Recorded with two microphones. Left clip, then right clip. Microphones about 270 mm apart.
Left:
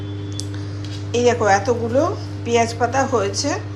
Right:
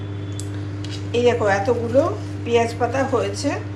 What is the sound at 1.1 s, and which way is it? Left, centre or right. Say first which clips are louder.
A woman's voice: left 2 dB; centre.